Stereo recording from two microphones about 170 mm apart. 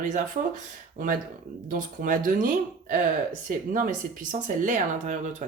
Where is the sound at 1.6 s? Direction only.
50° right (ahead or behind).